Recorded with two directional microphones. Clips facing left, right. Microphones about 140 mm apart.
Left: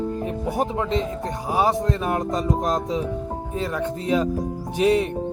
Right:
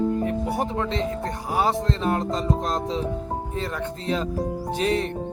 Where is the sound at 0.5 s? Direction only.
15° left (ahead or behind).